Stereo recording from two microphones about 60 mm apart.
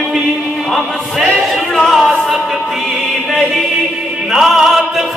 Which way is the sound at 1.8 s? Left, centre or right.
Centre.